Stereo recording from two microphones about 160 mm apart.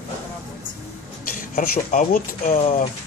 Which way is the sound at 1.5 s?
65° left (ahead or behind).